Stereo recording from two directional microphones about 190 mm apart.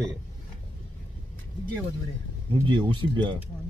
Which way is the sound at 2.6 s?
25° right (ahead or behind).